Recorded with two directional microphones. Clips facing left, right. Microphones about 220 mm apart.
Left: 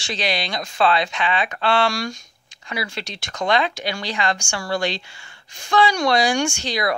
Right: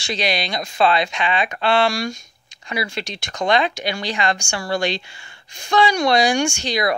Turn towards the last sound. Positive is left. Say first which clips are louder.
# right 2 dB
turn(degrees=-15)  # may be behind; listen again after turning